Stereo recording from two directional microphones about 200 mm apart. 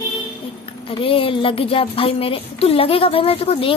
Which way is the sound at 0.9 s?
25° left (ahead or behind).